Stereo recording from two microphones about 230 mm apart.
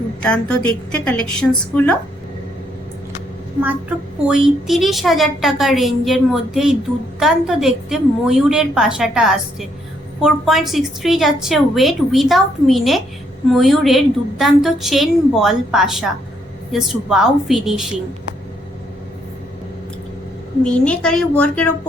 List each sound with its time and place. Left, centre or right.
0.2 s a woman's voice: centre
3.6 s a woman's voice: centre
20.7 s a woman's voice: centre